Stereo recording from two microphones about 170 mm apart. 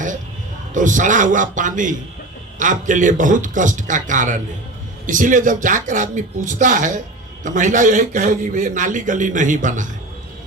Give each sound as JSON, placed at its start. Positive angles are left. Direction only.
{"t": 0.7, "sound": "a man's voice", "side_deg": -50}